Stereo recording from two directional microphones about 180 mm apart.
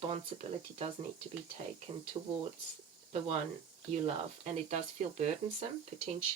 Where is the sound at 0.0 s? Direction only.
30° right (ahead or behind).